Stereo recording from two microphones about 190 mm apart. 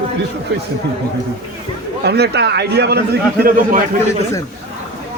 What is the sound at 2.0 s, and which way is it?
A man's voice, 60° right (ahead or behind).